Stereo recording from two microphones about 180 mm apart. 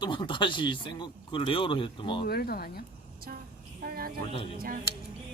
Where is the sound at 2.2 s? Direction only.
60° left (ahead or behind).